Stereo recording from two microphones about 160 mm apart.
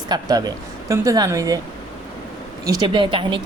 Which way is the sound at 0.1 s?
25° right (ahead or behind).